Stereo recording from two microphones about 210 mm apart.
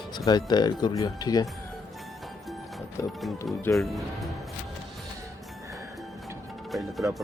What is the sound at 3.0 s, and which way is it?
Speech, 15° left (ahead or behind).